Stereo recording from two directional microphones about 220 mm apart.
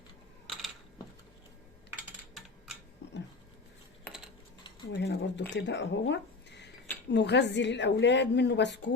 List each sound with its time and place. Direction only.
0.4 s typing: centre (ahead or behind)
4.9 s a woman's voice: 50° left (ahead or behind)